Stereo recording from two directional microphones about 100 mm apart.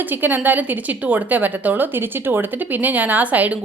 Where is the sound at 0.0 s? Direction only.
20° right (ahead or behind).